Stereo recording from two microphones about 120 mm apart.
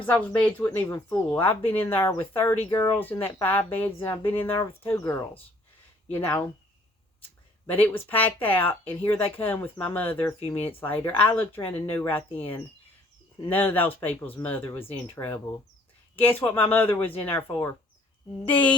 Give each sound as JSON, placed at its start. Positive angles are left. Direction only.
{"t": 0.0, "sound": "speech", "side_deg": 10}
{"t": 7.7, "sound": "speech", "side_deg": 15}
{"t": 13.5, "sound": "speech", "side_deg": 15}
{"t": 14.8, "sound": "speech", "side_deg": 55}
{"t": 15.1, "sound": "speech", "side_deg": 20}